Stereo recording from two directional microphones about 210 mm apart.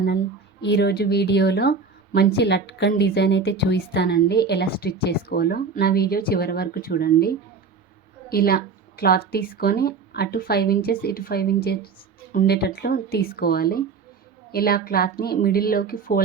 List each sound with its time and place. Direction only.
0.6 s a woman's voice: 55° left (ahead or behind)